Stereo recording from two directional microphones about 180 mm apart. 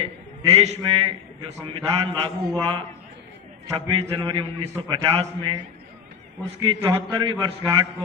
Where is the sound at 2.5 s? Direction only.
25° right (ahead or behind).